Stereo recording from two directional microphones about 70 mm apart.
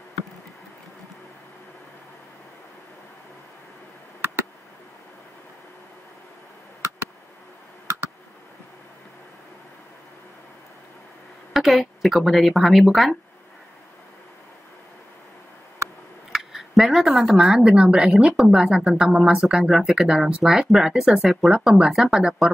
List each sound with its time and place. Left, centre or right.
11.5 s speech: centre
16.3 s a sound: centre
17.3 s speech: centre